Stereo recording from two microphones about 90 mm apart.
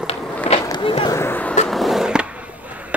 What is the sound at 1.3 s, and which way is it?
Skateboard, 20° left (ahead or behind).